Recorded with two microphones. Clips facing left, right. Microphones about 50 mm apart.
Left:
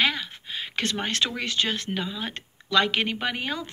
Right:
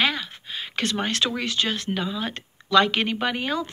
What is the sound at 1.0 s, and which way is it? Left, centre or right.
Speech, left.